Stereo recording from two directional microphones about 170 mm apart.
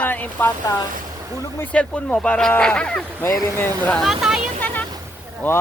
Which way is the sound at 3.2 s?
15° left (ahead or behind).